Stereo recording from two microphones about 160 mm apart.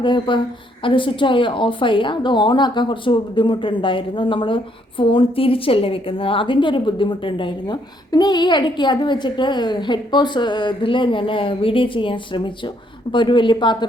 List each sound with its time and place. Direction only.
0.0 s a woman's voice: 30° left (ahead or behind)